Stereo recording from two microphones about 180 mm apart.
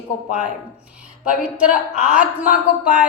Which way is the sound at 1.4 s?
5° right (ahead or behind).